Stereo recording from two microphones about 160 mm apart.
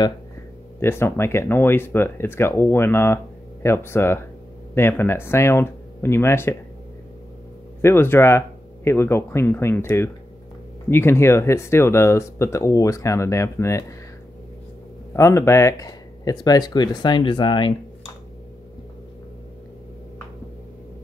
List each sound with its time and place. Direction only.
0.7 s speech: 15° left (ahead or behind)
7.8 s speech: 15° left (ahead or behind)
15.1 s speech: 20° left (ahead or behind)